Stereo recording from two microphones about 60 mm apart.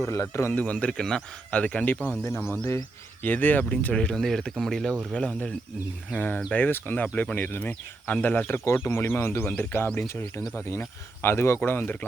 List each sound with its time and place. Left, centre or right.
0.1 s speech: left
0.5 s speech: left
0.9 s speech: centre
1.5 s speech: left
3.2 s speech: left
3.9 s speech: centre
6.1 s speech: left
8.4 s speech: left
9.9 s speech: left
10.7 s speech: left